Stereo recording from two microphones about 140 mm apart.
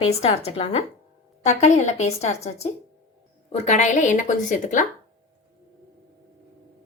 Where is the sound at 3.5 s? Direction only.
55° left (ahead or behind).